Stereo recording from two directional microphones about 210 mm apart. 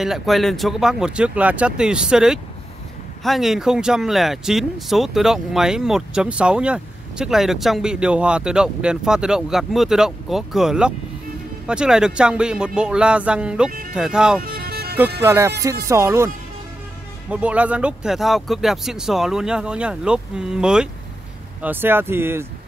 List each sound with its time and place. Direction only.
0.0 s speech: centre (ahead or behind)
14.4 s music: 45° right (ahead or behind)
15.2 s speech: 10° right (ahead or behind)
17.3 s speech: 5° right (ahead or behind)